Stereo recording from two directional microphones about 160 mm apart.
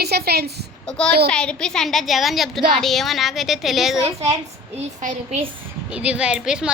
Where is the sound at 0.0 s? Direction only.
85° right.